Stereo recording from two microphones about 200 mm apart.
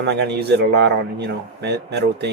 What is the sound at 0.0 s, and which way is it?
Speech, 60° right (ahead or behind).